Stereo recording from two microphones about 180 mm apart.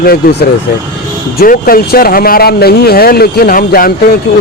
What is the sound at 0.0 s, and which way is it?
Speech, 60° left (ahead or behind).